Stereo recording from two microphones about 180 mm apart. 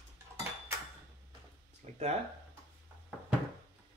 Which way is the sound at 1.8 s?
35° right (ahead or behind).